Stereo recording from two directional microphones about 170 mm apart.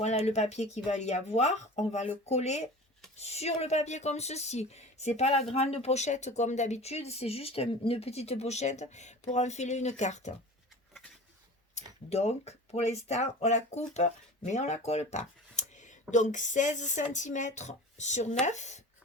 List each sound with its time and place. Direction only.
0.0 s speech: 40° left (ahead or behind)
12.0 s speech: 40° left (ahead or behind)